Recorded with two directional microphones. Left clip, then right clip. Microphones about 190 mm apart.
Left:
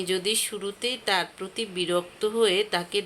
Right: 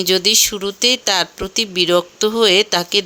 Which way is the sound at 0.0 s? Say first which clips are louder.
Right 12 dB; 40° right (ahead or behind).